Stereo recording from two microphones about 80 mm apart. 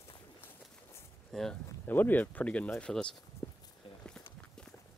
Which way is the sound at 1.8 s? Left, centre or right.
Left.